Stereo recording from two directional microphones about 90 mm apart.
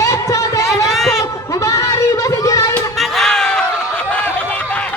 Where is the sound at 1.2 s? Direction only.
35° left (ahead or behind).